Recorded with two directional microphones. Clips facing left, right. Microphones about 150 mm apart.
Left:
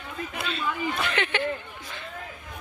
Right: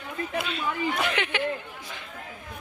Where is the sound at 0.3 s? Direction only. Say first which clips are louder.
Right 1 dB; 10° right (ahead or behind).